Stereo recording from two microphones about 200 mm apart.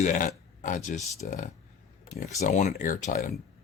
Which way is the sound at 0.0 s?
40° left (ahead or behind).